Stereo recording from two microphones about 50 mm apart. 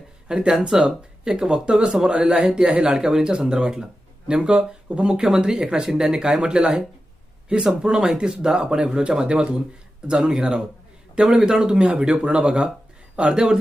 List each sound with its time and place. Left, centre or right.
0.3 s speech: centre